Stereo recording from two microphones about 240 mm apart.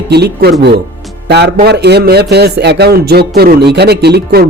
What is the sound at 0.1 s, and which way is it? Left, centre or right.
Speech, right.